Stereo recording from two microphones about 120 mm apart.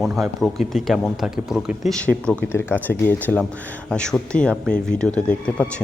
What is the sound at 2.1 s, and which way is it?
Speech, 15° left (ahead or behind).